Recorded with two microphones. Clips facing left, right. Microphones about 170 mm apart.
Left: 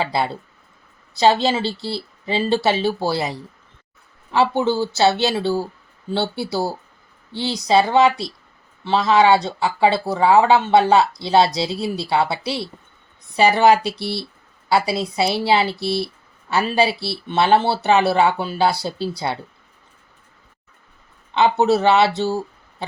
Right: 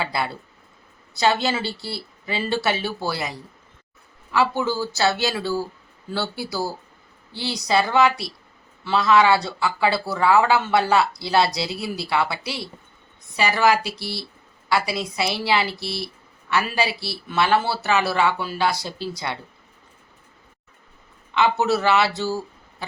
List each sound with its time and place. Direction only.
0.0 s speech: 25° left (ahead or behind)
21.6 s speech: 25° left (ahead or behind)